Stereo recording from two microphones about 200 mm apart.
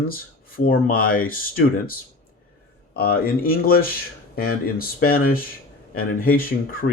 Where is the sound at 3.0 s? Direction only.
50° left (ahead or behind).